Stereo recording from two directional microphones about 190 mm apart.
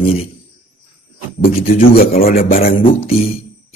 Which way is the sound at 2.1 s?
35° left (ahead or behind).